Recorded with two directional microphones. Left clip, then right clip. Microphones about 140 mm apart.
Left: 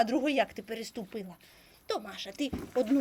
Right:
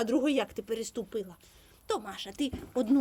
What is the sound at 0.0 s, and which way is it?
Speech, 50° right (ahead or behind).